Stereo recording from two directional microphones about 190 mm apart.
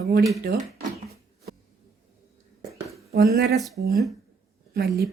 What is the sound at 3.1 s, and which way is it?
Speech, 55° right (ahead or behind).